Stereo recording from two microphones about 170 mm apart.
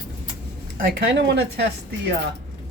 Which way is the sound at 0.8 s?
80° right.